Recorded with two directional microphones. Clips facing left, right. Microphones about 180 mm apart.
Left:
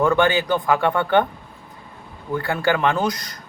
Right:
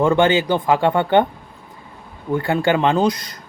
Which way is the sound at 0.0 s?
20° right (ahead or behind).